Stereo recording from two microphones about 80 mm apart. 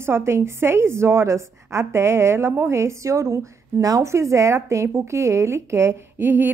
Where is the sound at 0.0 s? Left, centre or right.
Right.